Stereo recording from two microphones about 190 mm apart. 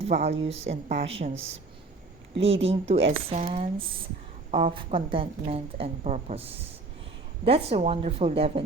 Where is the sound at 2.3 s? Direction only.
30° right (ahead or behind).